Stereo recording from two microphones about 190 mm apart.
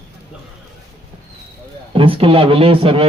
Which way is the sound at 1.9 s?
30° right (ahead or behind).